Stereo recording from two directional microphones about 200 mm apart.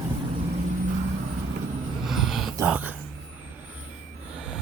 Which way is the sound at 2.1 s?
Centre (ahead or behind).